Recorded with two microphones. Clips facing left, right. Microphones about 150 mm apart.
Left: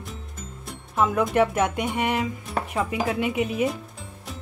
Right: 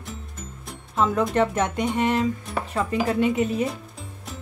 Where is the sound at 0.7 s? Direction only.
10° left (ahead or behind).